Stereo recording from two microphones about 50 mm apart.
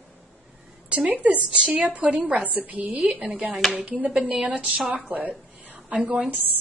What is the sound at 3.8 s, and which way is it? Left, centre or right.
A woman's voice, right.